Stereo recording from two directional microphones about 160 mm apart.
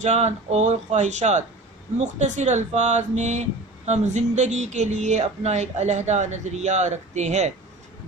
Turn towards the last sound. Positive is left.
turn(degrees=-45)  # may be behind; listen again after turning